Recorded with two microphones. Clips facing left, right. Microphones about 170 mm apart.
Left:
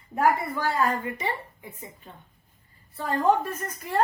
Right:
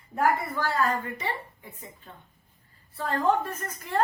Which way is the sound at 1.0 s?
15° left (ahead or behind).